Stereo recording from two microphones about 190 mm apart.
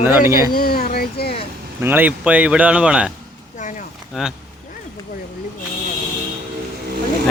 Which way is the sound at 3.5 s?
40° left (ahead or behind).